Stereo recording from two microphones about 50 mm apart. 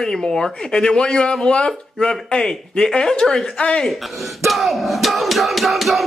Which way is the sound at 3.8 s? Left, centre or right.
Centre.